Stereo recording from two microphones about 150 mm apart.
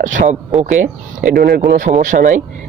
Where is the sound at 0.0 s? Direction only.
55° right (ahead or behind).